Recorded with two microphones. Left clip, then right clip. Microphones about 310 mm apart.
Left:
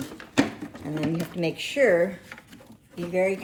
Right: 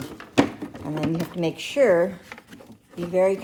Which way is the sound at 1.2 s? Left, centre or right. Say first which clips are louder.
Right 1 dB; centre.